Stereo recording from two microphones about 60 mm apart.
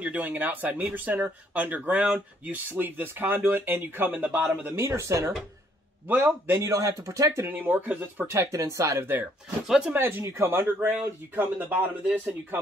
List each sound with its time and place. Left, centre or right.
0.0 s speech: right
4.4 s speech: centre
4.6 s speech: right
6.0 s speech: right
6.6 s speech: right
7.4 s speech: right
8.3 s speech: right
8.5 s speech: right
9.9 s speech: right
10.9 s speech: right